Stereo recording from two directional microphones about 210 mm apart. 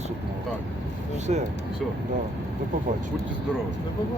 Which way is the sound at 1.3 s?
30° right (ahead or behind).